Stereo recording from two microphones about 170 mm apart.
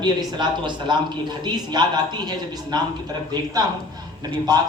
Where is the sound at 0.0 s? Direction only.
25° right (ahead or behind).